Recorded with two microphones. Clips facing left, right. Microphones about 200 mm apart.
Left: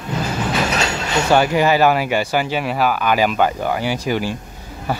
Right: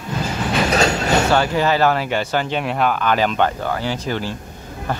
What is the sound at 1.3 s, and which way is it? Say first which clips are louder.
Speech: left 2 dB; 15° left (ahead or behind).